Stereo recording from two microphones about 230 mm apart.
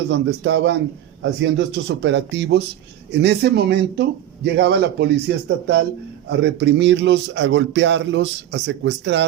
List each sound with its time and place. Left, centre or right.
0.1 s a man's voice: right